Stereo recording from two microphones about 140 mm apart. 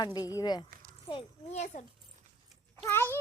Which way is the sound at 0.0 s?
30° left (ahead or behind).